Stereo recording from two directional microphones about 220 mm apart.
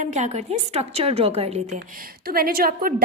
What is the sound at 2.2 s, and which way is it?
Speech, 45° right (ahead or behind).